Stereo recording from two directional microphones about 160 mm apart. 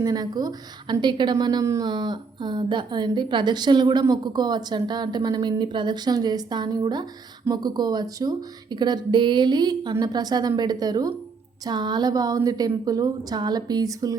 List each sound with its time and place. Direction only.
0.0 s a woman's voice: 25° right (ahead or behind)